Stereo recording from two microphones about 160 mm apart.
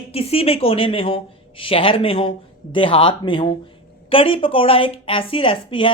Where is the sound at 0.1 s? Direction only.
40° left (ahead or behind).